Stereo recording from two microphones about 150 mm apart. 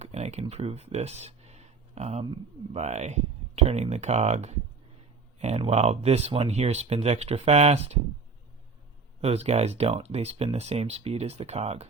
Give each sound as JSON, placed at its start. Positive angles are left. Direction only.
{"t": 0.0, "sound": "a sound", "side_deg": -50}
{"t": 2.7, "sound": "speech", "side_deg": -50}
{"t": 9.2, "sound": "speech", "side_deg": -45}